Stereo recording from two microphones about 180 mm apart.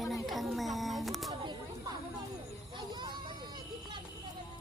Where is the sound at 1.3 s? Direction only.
25° right (ahead or behind).